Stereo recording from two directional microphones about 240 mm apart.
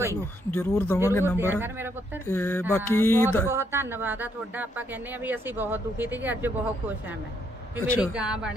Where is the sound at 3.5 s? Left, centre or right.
Centre.